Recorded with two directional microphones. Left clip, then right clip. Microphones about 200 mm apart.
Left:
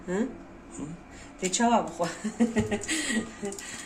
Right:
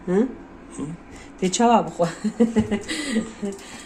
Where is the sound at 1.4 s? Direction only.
45° right (ahead or behind).